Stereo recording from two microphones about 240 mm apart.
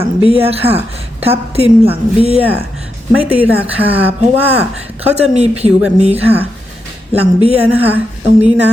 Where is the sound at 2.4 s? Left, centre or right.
Centre.